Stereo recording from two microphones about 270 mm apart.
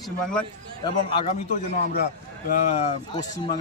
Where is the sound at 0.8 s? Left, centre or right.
Left.